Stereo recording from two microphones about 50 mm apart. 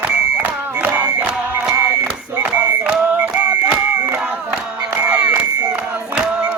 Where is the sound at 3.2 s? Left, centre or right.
Right.